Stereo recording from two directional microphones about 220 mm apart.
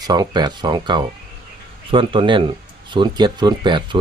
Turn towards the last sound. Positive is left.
turn(degrees=-20)  # may be behind; listen again after turning